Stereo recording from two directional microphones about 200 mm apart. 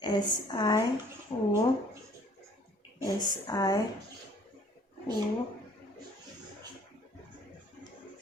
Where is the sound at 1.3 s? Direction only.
30° left (ahead or behind).